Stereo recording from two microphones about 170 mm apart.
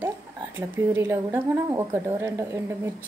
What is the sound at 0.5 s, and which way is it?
A woman's voice, 15° right (ahead or behind).